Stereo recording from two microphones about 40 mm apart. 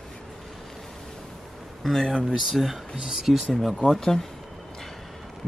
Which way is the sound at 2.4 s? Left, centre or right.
Centre.